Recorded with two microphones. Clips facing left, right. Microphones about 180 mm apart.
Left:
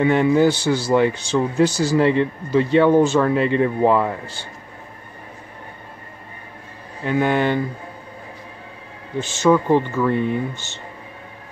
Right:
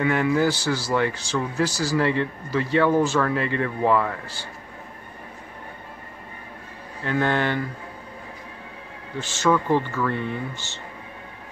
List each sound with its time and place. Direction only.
0.0 s speech: 25° left (ahead or behind)
7.0 s speech: 15° left (ahead or behind)
9.2 s speech: 15° left (ahead or behind)